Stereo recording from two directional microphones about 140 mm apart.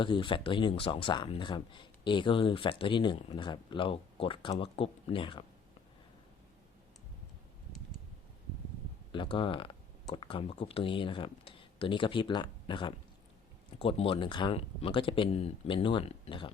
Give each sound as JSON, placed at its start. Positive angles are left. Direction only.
{"t": 0.0, "sound": "speech", "side_deg": 35}
{"t": 9.1, "sound": "speech", "side_deg": 35}